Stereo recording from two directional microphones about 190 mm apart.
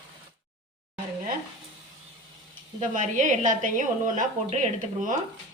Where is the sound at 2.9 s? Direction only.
40° right (ahead or behind).